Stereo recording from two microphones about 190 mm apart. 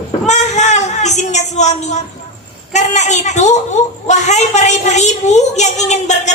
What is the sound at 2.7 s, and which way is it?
A woman's voice, 40° left (ahead or behind).